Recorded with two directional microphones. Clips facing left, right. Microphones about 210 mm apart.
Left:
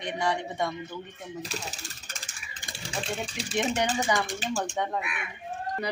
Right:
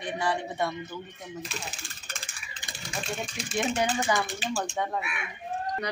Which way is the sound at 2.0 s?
45° left (ahead or behind).